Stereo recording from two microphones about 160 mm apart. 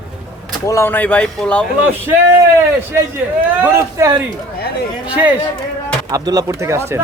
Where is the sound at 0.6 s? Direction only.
15° left (ahead or behind).